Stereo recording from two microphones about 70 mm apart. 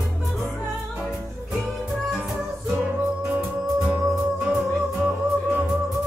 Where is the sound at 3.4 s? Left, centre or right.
Centre.